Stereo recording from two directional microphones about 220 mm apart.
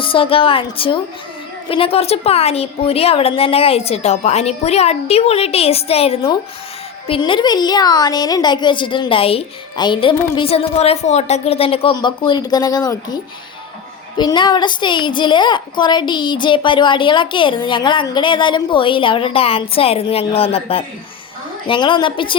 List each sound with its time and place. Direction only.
0.0 s a woman's voice: 25° left (ahead or behind)
14.2 s a woman's voice: 20° left (ahead or behind)